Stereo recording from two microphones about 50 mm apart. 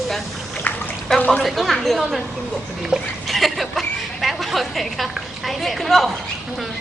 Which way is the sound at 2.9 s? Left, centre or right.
Centre.